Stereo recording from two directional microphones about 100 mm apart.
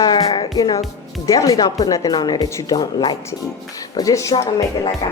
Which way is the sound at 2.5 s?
30° left (ahead or behind).